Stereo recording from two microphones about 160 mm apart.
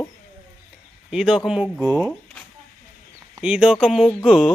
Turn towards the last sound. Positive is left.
turn(degrees=0)  # may be behind; listen again after turning